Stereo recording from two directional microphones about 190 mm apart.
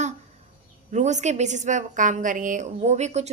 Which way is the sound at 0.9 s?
40° right (ahead or behind).